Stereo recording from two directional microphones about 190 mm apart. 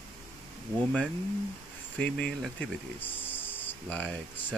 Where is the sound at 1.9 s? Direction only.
5° left (ahead or behind).